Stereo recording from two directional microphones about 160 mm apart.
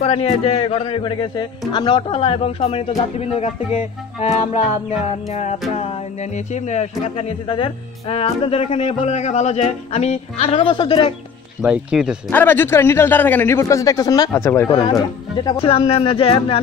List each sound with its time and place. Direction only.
0.0 s speech: 35° left (ahead or behind)
5.3 s music: 45° left (ahead or behind)
5.8 s speech: 45° left (ahead or behind)
11.6 s speech: 5° right (ahead or behind)
12.3 s a man's voice: 10° left (ahead or behind)
15.6 s speech: 35° left (ahead or behind)